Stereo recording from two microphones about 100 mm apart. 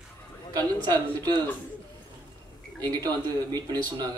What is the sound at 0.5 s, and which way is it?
Speech, 40° right (ahead or behind).